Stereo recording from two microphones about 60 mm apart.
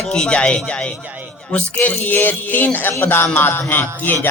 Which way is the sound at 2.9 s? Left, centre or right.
Left.